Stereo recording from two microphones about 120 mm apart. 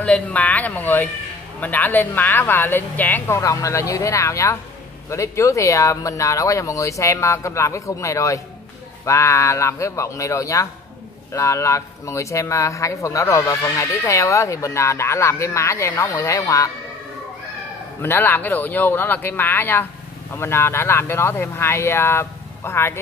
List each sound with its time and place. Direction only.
0.0 s speech: 10° left (ahead or behind); by 16.7 s 30° left (ahead or behind)
18.0 s speech: 15° left (ahead or behind)